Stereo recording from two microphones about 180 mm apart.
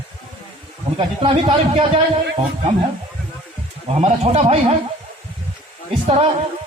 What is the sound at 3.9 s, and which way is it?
Speech, 35° right (ahead or behind).